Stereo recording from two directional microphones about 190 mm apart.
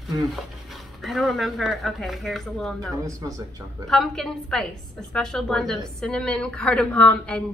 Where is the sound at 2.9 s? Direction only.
15° right (ahead or behind).